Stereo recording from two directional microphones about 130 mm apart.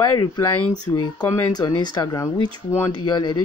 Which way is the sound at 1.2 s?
15° left (ahead or behind).